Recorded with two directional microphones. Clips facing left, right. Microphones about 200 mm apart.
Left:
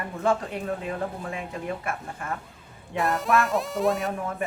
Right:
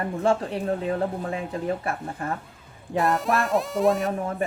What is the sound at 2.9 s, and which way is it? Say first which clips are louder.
Music: right 1 dB; centre (ahead or behind).